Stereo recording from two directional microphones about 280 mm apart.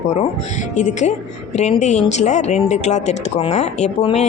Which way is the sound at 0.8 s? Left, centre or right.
Left.